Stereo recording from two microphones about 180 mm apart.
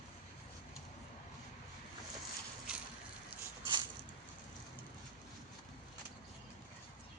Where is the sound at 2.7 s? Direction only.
5° right (ahead or behind).